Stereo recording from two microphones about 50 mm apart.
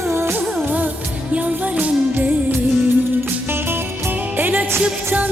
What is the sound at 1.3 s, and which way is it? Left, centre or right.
Music, right.